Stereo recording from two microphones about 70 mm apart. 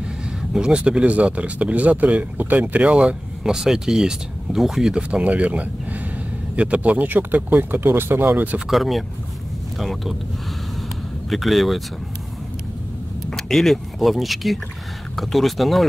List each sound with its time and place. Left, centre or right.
0.5 s speech: centre; by 8.5 s right
8.5 s speech: centre
11.2 s speech: centre
13.3 s speech: centre